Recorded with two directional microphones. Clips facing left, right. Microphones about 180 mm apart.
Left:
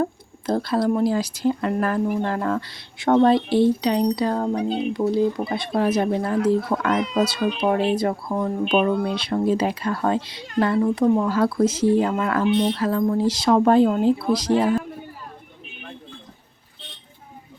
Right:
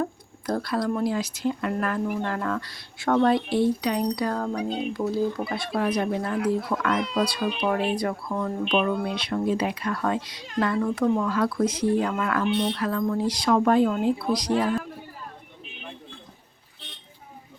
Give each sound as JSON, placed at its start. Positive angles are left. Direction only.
{"t": 0.4, "sound": "speech", "side_deg": 25}
{"t": 7.0, "sound": "speech", "side_deg": 5}
{"t": 7.9, "sound": "speech", "side_deg": 25}
{"t": 11.3, "sound": "speech", "side_deg": 30}